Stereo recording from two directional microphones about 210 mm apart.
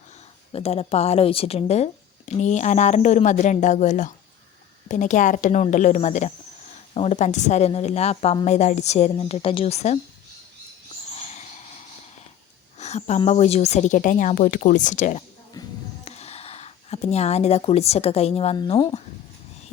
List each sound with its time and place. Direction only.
0.5 s speech: 30° left (ahead or behind)
11.1 s a sound: 35° left (ahead or behind)
12.8 s speech: 30° left (ahead or behind)
15.6 s music: 20° left (ahead or behind)
16.0 s speech: 30° left (ahead or behind)